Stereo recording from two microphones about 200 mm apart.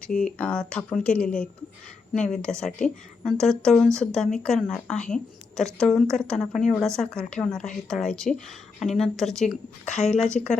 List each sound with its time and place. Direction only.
0.3 s a woman's voice: 5° left (ahead or behind)
9.8 s speech: 35° left (ahead or behind)